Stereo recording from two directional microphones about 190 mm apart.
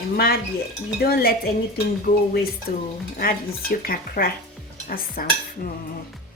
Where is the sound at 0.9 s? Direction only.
55° left (ahead or behind).